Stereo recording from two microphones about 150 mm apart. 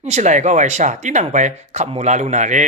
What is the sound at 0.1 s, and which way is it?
A man's voice, 50° right (ahead or behind).